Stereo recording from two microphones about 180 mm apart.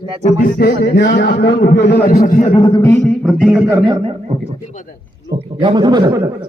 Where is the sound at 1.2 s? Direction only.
80° left; by 2.5 s 45° left (ahead or behind).